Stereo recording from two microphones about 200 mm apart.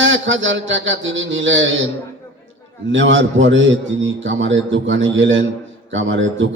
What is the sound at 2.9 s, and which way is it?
A man's voice, 70° right (ahead or behind).